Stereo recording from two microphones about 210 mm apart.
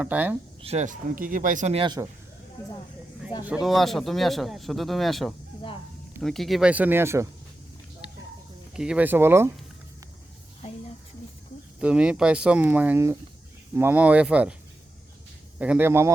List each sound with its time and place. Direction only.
0.0 s speech: 5° right (ahead or behind)
0.6 s speech: 30° right (ahead or behind)
3.4 s speech: 5° right (ahead or behind)
8.7 s speech: 5° right (ahead or behind)
11.8 s speech: 5° right (ahead or behind)
15.5 s speech: 5° right (ahead or behind)